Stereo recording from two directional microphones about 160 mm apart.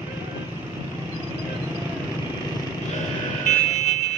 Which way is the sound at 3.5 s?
50° left (ahead or behind).